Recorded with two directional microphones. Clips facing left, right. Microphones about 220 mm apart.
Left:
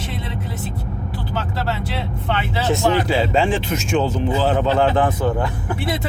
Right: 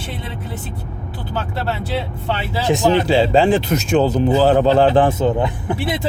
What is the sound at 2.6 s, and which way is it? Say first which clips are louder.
Speech: right 3 dB; 15° right (ahead or behind).